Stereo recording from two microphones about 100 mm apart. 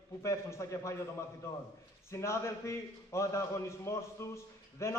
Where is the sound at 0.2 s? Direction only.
30° left (ahead or behind).